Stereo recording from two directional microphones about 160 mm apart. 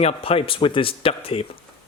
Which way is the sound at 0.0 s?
40° left (ahead or behind).